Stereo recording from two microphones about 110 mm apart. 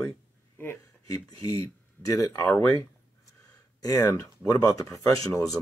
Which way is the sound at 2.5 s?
20° left (ahead or behind).